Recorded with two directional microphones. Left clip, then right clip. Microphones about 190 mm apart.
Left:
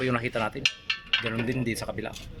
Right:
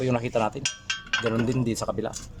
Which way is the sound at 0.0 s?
15° right (ahead or behind).